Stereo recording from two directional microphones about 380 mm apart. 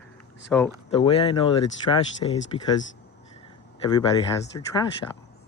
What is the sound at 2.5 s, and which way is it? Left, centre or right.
Speech, centre.